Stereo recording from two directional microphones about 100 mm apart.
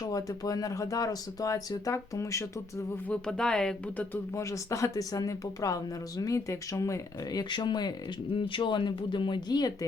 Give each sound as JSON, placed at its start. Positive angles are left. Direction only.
{"t": 0.0, "sound": "speech", "side_deg": 35}
{"t": 3.1, "sound": "speech", "side_deg": 5}
{"t": 4.4, "sound": "speech", "side_deg": 30}
{"t": 8.4, "sound": "speech", "side_deg": 55}